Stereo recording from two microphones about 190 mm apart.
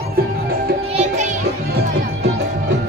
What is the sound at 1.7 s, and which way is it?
Music, 55° right (ahead or behind).